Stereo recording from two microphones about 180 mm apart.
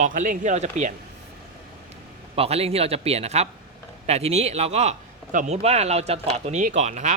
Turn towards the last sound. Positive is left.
turn(degrees=-40)  # may be behind; listen again after turning